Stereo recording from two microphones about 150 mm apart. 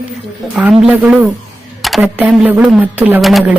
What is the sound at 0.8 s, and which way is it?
A woman's voice, 5° right (ahead or behind).